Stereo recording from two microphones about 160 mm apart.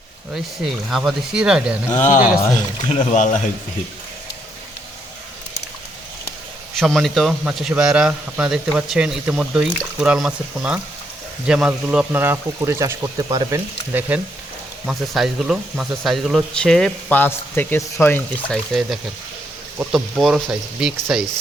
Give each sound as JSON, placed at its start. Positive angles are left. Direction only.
{"t": 0.3, "sound": "a man's voice", "side_deg": 0}
{"t": 2.0, "sound": "speech", "side_deg": 50}
{"t": 6.7, "sound": "a man's voice", "side_deg": 0}
{"t": 14.8, "sound": "a man's voice", "side_deg": -5}